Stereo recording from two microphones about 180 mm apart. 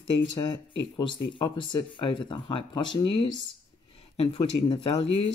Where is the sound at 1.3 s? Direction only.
25° left (ahead or behind).